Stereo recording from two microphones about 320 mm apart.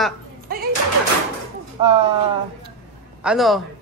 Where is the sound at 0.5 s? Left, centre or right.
Right.